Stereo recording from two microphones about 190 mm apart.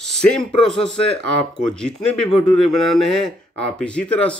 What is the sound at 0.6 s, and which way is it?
Speech, 65° right (ahead or behind).